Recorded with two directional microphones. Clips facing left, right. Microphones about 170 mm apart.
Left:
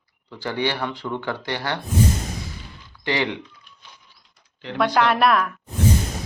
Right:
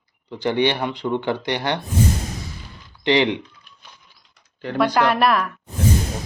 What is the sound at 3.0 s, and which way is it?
Speech, 20° right (ahead or behind).